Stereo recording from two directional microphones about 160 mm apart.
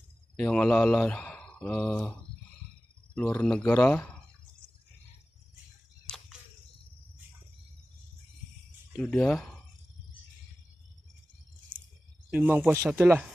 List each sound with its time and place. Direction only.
0.4 s speech: 5° left (ahead or behind)
3.2 s speech: 5° left (ahead or behind)
6.0 s a sound: 5° left (ahead or behind)
8.9 s speech: 5° left (ahead or behind)
12.3 s speech: 10° right (ahead or behind)